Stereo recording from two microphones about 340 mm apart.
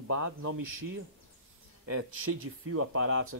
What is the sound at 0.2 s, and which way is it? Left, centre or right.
Speech, right.